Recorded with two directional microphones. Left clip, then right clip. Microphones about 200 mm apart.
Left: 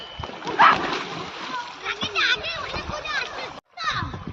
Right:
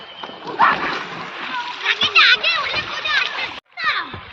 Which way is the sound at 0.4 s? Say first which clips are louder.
Even; 10° left (ahead or behind).